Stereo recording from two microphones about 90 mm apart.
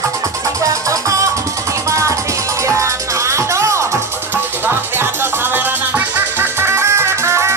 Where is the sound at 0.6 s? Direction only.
40° right (ahead or behind).